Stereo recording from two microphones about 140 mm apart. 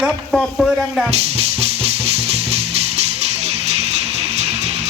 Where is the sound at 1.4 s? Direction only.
45° right (ahead or behind).